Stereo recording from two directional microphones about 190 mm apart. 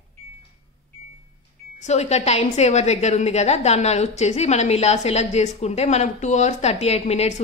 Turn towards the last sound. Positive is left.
turn(degrees=35)  # may be behind; listen again after turning